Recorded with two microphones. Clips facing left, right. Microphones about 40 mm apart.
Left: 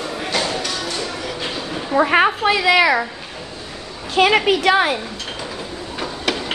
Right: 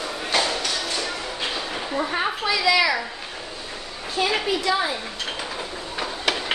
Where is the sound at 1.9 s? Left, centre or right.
Left.